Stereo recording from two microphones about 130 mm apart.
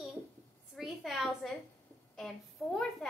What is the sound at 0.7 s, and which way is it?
A woman's voice, centre (ahead or behind).